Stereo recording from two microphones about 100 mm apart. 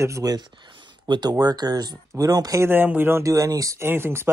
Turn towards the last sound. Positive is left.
turn(degrees=-25)  # may be behind; listen again after turning